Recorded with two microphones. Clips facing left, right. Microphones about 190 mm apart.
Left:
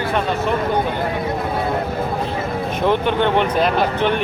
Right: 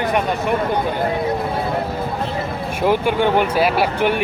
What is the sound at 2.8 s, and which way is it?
Speech, 10° right (ahead or behind).